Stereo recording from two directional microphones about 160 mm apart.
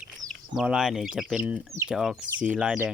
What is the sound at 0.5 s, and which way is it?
Speech, 5° right (ahead or behind).